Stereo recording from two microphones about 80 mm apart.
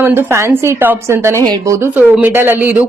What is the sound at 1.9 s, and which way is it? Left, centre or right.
Speech, right.